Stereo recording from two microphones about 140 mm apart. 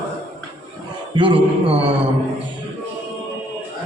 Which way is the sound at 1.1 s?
35° right (ahead or behind).